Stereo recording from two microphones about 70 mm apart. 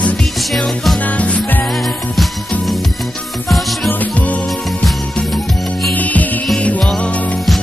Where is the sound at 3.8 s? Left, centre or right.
Left.